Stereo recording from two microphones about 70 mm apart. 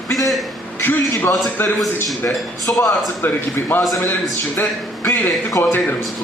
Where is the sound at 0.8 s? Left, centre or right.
Left.